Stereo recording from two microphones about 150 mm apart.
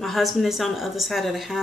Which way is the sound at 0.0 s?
Centre (ahead or behind).